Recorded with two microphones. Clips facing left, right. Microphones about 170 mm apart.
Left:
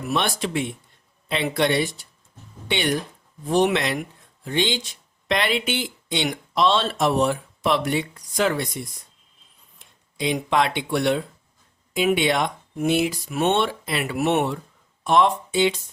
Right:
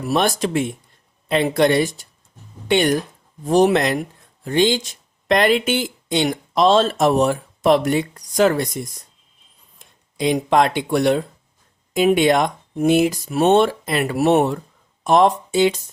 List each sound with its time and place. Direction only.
0.0 s speech: 40° right (ahead or behind)